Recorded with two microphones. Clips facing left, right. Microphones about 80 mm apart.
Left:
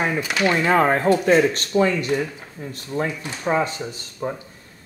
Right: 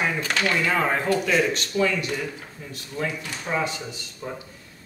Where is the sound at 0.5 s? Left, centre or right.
Left.